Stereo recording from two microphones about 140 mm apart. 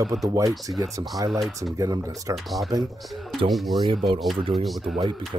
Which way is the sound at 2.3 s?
Centre (ahead or behind).